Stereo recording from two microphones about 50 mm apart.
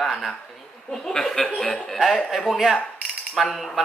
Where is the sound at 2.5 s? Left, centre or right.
Centre.